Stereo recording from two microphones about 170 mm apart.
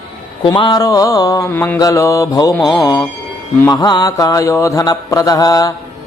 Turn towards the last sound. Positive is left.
turn(degrees=20)  # may be behind; listen again after turning